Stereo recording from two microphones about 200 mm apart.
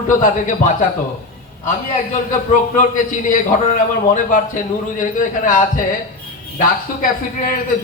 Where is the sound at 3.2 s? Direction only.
40° left (ahead or behind).